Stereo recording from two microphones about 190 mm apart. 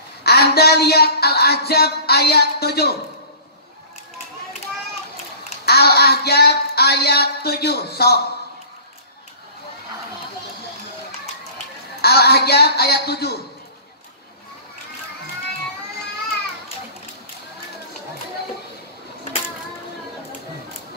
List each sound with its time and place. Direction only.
0.2 s speech: 55° left (ahead or behind)
5.7 s speech: 55° left (ahead or behind)
12.0 s speech: 55° left (ahead or behind)